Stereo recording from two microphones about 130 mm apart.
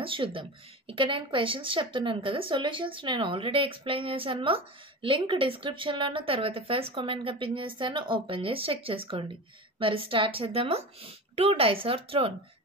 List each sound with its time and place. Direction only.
0.0 s a woman's voice: 40° right (ahead or behind)